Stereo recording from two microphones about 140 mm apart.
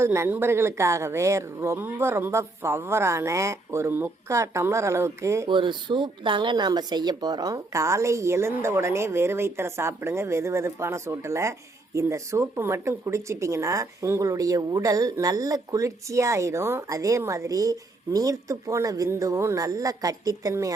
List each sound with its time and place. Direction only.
0.0 s speech: 20° right (ahead or behind)
5.5 s speech: 35° right (ahead or behind)